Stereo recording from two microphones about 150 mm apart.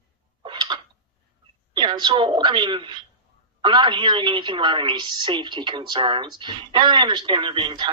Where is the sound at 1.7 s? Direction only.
30° right (ahead or behind).